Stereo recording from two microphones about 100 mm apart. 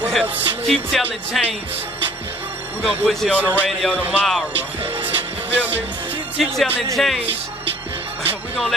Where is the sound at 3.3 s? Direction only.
15° right (ahead or behind).